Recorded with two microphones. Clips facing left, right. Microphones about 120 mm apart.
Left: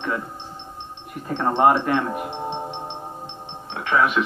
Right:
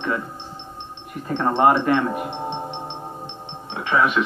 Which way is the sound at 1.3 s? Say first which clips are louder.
Even; 5° left (ahead or behind).